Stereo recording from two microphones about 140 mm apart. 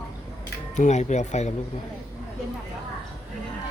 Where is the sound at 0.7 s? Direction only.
55° left (ahead or behind).